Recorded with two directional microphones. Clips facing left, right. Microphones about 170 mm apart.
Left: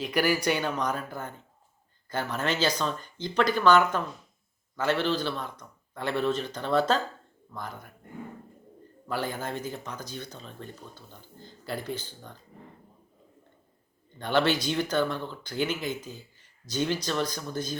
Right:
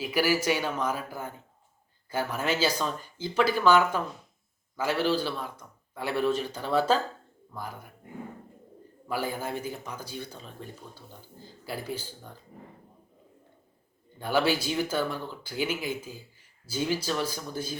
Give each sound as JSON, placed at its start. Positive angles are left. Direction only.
{"t": 0.0, "sound": "speech", "side_deg": -5}
{"t": 9.0, "sound": "speech", "side_deg": -10}
{"t": 14.2, "sound": "speech", "side_deg": -5}